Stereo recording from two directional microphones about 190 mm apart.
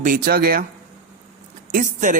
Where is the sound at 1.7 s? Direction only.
45° right (ahead or behind).